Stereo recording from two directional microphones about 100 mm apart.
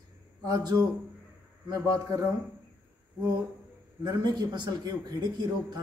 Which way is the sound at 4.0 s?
40° right (ahead or behind).